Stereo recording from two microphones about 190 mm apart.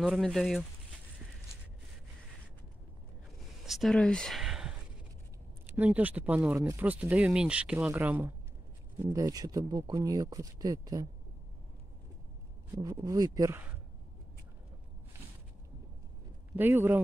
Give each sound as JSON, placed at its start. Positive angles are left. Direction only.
{"t": 0.0, "sound": "speech", "side_deg": 0}
{"t": 3.6, "sound": "speech", "side_deg": 0}
{"t": 12.8, "sound": "speech", "side_deg": -15}
{"t": 16.5, "sound": "speech", "side_deg": -10}